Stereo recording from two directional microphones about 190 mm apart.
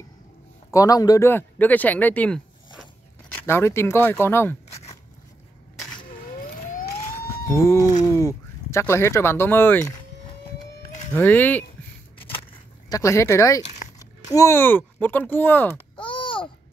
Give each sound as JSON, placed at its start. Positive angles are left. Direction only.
{"t": 0.7, "sound": "speech", "side_deg": 20}
{"t": 7.5, "sound": "speech", "side_deg": 15}
{"t": 11.1, "sound": "speech", "side_deg": 10}
{"t": 12.9, "sound": "speech", "side_deg": 15}
{"t": 16.0, "sound": "babbling", "side_deg": 25}